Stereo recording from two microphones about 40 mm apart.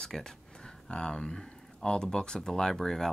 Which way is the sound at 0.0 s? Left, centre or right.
Centre.